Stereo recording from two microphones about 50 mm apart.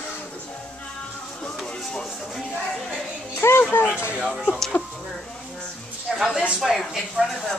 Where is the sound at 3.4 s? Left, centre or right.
Left.